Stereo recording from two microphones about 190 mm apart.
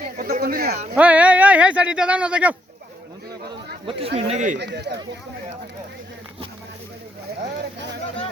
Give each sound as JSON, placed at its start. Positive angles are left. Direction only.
{"t": 0.0, "sound": "a sound", "side_deg": -45}
{"t": 0.9, "sound": "speech", "side_deg": -5}
{"t": 3.8, "sound": "speech", "side_deg": -30}
{"t": 4.5, "sound": "speech", "side_deg": -60}